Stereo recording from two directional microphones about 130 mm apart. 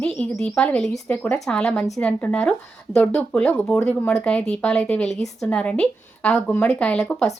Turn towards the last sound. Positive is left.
turn(degrees=5)  # may be behind; listen again after turning